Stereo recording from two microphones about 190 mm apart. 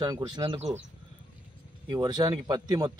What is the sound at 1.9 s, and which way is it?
Speech, 20° right (ahead or behind).